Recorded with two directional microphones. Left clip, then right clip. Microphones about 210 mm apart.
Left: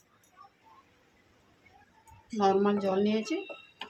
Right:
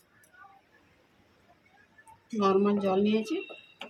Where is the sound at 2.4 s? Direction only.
Centre (ahead or behind).